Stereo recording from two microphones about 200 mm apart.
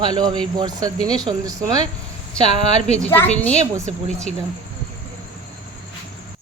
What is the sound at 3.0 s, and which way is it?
Speech, 10° left (ahead or behind).